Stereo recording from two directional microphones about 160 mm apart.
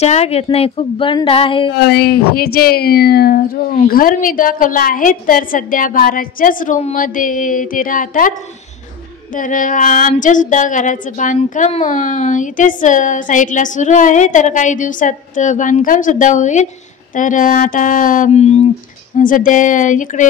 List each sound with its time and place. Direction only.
0.0 s a woman's voice: 40° left (ahead or behind)
1.8 s speech: 80° left
3.8 s a woman's voice: 60° left (ahead or behind)
9.4 s a sound: 55° left (ahead or behind)
17.1 s a woman's voice: 55° left (ahead or behind)
19.1 s a sound: 55° left (ahead or behind)